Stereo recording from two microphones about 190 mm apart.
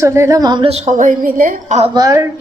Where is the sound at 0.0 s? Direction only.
15° right (ahead or behind); by 1.8 s 45° right (ahead or behind).